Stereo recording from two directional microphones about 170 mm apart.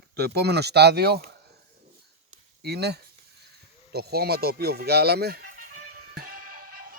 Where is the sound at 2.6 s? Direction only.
75° right (ahead or behind).